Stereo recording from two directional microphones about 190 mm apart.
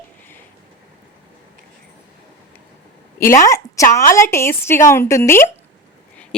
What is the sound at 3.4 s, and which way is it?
A woman's voice, 15° left (ahead or behind).